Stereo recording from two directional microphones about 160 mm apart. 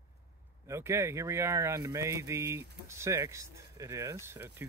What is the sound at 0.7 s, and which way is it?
Speech, 15° right (ahead or behind).